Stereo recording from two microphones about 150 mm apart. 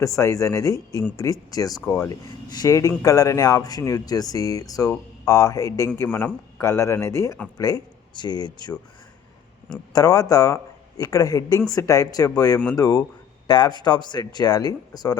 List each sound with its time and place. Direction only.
0.0 s speech: 20° left (ahead or behind)
9.9 s speech: 25° left (ahead or behind)